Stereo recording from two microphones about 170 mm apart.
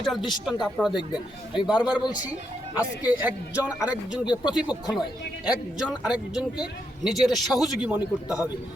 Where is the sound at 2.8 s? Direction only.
10° right (ahead or behind).